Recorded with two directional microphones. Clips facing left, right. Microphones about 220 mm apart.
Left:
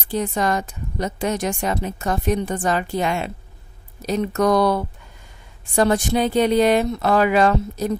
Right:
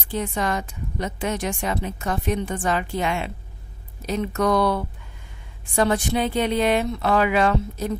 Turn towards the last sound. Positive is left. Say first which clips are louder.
# left 3 dB
turn(degrees=40)  # may be behind; listen again after turning